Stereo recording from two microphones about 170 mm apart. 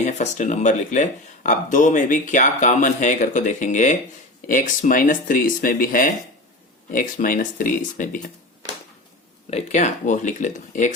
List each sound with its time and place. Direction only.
0.0 s speech: 45° left (ahead or behind)
9.5 s speech: 40° left (ahead or behind)